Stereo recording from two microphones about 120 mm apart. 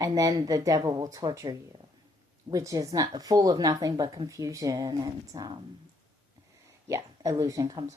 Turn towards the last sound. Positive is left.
turn(degrees=-35)  # may be behind; listen again after turning